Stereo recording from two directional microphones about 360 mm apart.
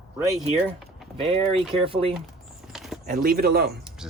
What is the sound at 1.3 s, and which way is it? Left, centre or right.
Speech, centre.